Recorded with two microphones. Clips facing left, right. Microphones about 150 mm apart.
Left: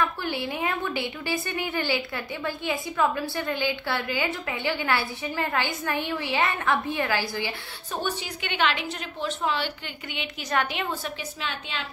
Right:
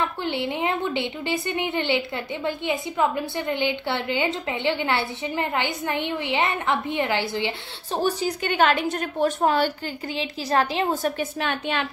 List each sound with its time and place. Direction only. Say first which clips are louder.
0.0 s a woman's voice: right 2 dB; 20° right (ahead or behind)
8.0 s a woman's voice: right 8 dB; 40° right (ahead or behind)
10.1 s a woman's voice: right 4 dB; 35° right (ahead or behind); by 11.9 s 55° right (ahead or behind)